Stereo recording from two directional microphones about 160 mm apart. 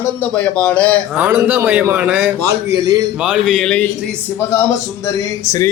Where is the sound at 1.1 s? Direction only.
10° right (ahead or behind).